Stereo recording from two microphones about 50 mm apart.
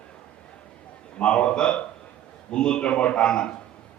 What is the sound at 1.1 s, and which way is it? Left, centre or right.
A man's voice, left.